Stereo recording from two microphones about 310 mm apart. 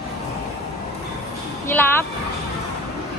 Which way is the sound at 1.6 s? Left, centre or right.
Centre.